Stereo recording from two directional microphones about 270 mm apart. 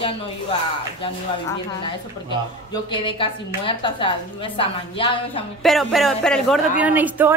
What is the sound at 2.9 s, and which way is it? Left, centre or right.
A woman's voice, centre.